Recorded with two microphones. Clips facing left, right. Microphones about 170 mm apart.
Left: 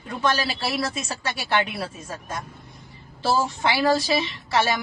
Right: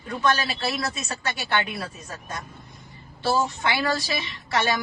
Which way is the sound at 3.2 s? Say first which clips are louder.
Left 1 dB; 30° left (ahead or behind).